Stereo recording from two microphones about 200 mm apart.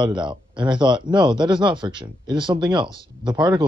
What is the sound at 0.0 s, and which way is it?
Speech, 25° right (ahead or behind).